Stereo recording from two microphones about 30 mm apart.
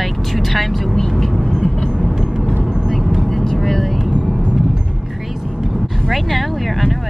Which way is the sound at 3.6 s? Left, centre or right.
Centre.